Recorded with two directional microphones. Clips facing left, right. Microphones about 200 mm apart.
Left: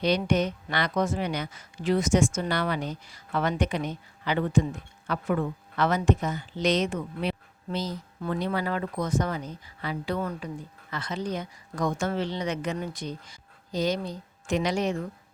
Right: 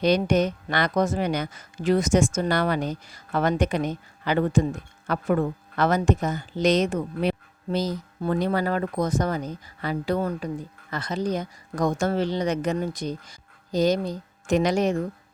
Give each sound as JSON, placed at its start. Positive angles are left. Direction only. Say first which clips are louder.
{"t": 0.0, "sound": "a woman's voice", "louder": "right 4 dB", "side_deg": -45}